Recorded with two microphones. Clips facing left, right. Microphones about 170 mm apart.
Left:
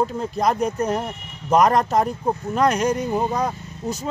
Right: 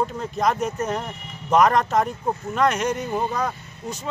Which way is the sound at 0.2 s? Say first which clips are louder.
Left 2 dB; 35° left (ahead or behind).